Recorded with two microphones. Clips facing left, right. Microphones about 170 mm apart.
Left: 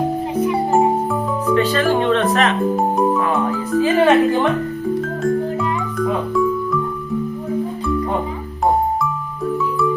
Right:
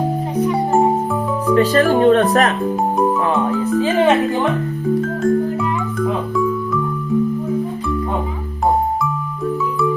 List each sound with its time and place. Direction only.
0.3 s music: 10° left (ahead or behind)
1.5 s speech: 40° right (ahead or behind)
2.7 s speech: centre (ahead or behind)
5.2 s music: centre (ahead or behind)